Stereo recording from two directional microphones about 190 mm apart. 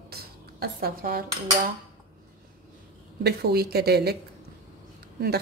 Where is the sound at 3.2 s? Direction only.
55° right (ahead or behind).